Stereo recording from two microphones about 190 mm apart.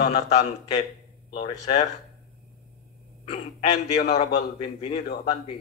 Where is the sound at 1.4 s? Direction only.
35° left (ahead or behind).